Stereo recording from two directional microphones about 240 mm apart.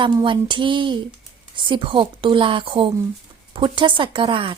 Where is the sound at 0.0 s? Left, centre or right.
Centre.